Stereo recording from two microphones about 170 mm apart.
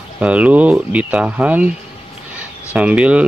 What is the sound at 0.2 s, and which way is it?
Speech, 5° right (ahead or behind).